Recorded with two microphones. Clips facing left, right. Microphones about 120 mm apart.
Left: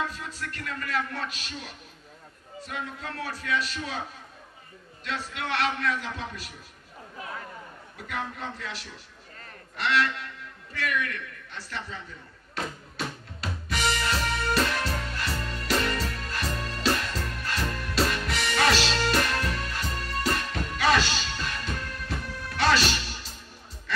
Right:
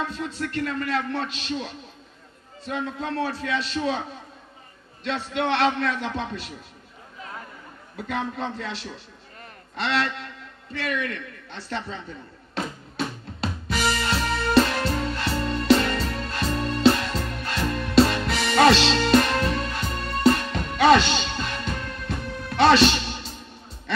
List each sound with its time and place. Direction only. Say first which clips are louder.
0.0 s a man's voice: right 5 dB; 25° right (ahead or behind)
8.1 s a man's voice: right 6 dB; 25° right (ahead or behind)
12.9 s music: right 5 dB; 25° right (ahead or behind)